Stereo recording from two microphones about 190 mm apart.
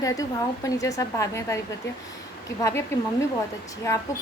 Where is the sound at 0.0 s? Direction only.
20° left (ahead or behind).